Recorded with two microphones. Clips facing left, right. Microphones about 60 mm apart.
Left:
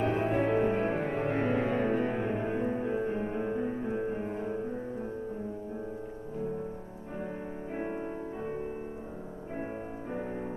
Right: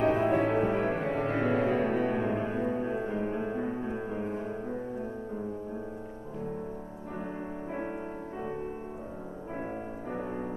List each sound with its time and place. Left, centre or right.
0.0 s music: right